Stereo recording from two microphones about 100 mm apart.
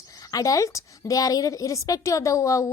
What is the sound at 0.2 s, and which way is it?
A woman's voice, 35° left (ahead or behind).